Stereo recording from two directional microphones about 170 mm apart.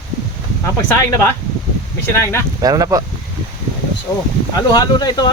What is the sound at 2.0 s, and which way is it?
Speech, 15° left (ahead or behind).